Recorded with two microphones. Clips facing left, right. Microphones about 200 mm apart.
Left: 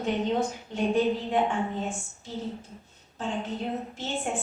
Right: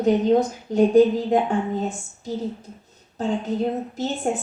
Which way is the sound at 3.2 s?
40° right (ahead or behind).